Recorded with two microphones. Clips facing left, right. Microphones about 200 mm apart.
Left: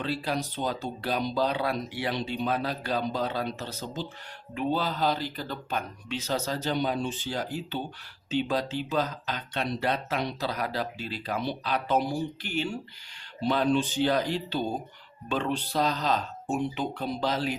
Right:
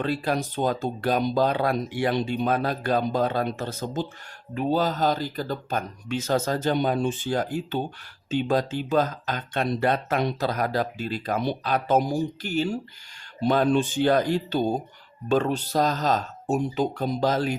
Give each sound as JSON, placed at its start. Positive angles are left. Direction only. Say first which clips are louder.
{"t": 0.0, "sound": "speech", "louder": "right 5 dB", "side_deg": -50}